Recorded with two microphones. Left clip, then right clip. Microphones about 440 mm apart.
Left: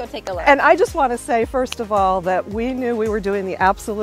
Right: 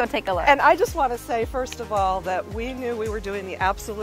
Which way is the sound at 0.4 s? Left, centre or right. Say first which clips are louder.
Left 4 dB; left.